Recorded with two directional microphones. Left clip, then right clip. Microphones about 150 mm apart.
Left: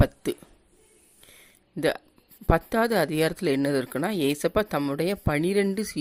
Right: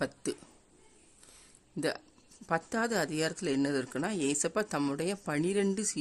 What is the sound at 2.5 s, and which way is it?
Speech, 20° left (ahead or behind).